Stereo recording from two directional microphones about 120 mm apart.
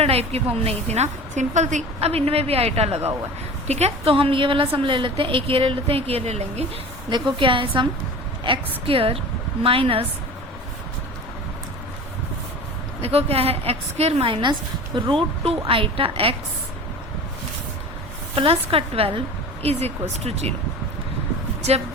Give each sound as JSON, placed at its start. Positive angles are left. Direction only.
{"t": 0.0, "sound": "a woman's voice", "side_deg": -55}
{"t": 2.0, "sound": "a woman's voice", "side_deg": -55}
{"t": 7.3, "sound": "a woman's voice", "side_deg": -45}
{"t": 8.9, "sound": "a woman's voice", "side_deg": -50}
{"t": 13.0, "sound": "a woman's voice", "side_deg": -55}
{"t": 18.3, "sound": "a woman's voice", "side_deg": -50}